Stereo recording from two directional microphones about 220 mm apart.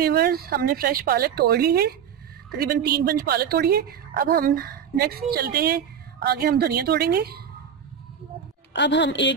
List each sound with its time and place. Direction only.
0.0 s a woman's voice: 45° right (ahead or behind)
8.7 s a woman's voice: 50° left (ahead or behind)